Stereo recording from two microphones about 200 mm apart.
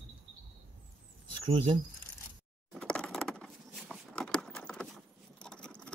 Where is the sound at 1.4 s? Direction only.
25° right (ahead or behind).